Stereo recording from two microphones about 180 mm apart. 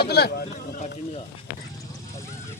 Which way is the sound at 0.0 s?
65° left (ahead or behind).